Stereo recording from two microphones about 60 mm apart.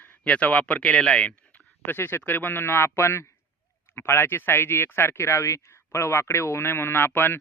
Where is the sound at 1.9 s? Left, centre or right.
Left.